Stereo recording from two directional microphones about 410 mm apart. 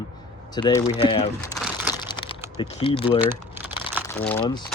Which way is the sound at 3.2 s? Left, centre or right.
Centre.